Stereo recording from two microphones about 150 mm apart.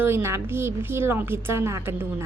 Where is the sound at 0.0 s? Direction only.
15° right (ahead or behind).